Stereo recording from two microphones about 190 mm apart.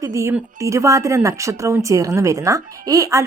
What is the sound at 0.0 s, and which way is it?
Speech, 15° right (ahead or behind).